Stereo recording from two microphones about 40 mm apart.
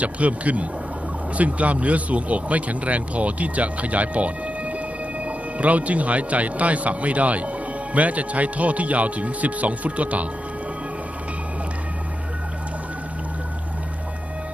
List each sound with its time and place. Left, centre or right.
0.0 s speech: right